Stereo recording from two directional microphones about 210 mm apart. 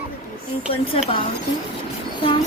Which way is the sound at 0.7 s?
25° left (ahead or behind).